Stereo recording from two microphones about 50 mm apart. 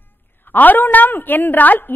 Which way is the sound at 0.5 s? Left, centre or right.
Left.